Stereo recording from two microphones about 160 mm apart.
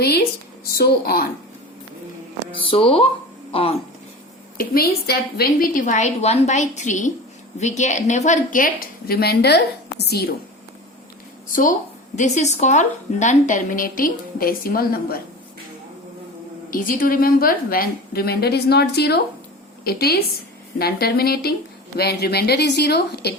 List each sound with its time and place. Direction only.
0.0 s a woman's voice: 80° left
2.6 s speech: 35° left (ahead or behind)
4.5 s a woman's voice: 70° left (ahead or behind)
12.1 s a woman's voice: 50° left (ahead or behind); by 15.2 s 65° left (ahead or behind)
16.6 s a woman's voice: 60° left (ahead or behind); by 19.2 s 90° left
19.8 s a woman's voice: 75° left (ahead or behind)
21.9 s speech: 85° left